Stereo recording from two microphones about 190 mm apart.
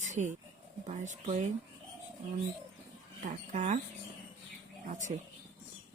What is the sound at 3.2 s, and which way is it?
Speech, 40° right (ahead or behind).